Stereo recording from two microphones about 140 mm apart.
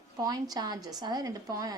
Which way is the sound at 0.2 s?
25° right (ahead or behind).